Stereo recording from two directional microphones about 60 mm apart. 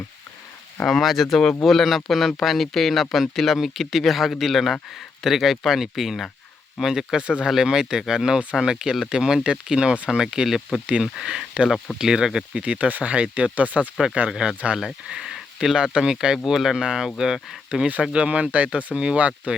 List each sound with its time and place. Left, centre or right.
0.9 s speech: centre
12.6 s speech: right
14.3 s speech: centre
17.7 s speech: centre